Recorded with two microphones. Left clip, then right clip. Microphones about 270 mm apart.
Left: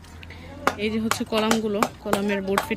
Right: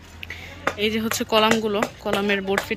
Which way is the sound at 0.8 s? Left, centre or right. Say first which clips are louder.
Right 2 dB; centre.